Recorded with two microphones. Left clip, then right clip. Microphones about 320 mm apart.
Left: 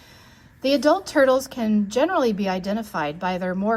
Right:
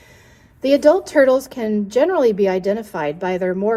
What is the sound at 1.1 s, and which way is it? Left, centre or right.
A woman's voice, right.